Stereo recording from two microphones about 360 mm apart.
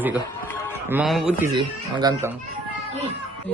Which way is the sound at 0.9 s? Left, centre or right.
Centre.